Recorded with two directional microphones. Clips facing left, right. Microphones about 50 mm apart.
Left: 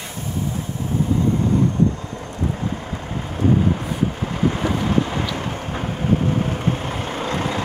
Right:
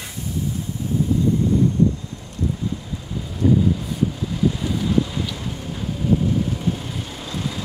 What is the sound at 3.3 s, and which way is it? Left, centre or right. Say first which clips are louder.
Boat: even; left.